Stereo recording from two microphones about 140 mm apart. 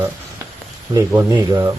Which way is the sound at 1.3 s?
25° right (ahead or behind).